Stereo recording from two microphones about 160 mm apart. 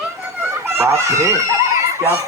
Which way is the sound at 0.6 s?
15° right (ahead or behind).